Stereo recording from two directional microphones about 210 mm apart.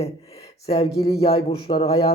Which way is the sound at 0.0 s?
30° left (ahead or behind).